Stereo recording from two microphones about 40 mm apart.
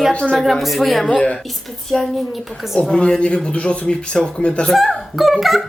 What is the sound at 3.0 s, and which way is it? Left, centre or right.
Speech, left.